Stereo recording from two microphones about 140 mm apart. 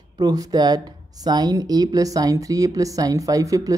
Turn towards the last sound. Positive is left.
turn(degrees=-25)  # may be behind; listen again after turning